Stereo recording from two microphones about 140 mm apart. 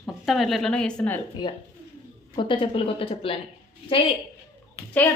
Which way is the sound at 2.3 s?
35° left (ahead or behind).